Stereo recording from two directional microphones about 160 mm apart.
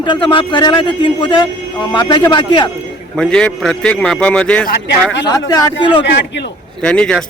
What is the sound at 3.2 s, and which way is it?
A man's voice, 5° left (ahead or behind).